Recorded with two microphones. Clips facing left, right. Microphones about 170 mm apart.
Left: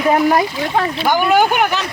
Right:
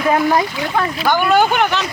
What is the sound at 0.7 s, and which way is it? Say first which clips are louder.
Speech: left 1 dB; 25° left (ahead or behind).